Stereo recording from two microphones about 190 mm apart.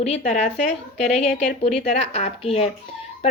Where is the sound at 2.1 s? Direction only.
35° left (ahead or behind).